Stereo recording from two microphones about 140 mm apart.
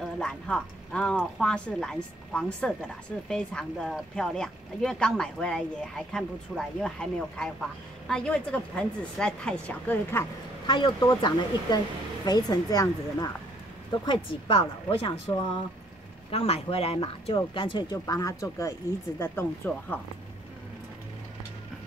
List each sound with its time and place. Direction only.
0.0 s a woman's voice: 5° left (ahead or behind)
10.7 s speech: 30° left (ahead or behind)
17.9 s speech: 25° left (ahead or behind)